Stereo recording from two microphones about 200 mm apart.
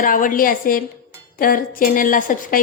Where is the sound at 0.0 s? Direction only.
45° left (ahead or behind).